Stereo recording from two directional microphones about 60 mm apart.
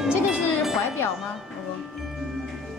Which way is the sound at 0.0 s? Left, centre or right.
Centre.